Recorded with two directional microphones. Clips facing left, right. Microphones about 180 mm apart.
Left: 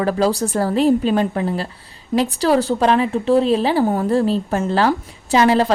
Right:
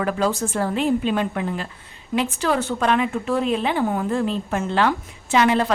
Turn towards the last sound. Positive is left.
turn(degrees=35)  # may be behind; listen again after turning